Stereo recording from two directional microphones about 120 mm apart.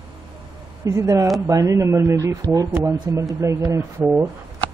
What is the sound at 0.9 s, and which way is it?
Speech, 25° right (ahead or behind).